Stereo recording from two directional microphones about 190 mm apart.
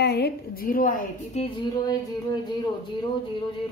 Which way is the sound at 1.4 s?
25° left (ahead or behind).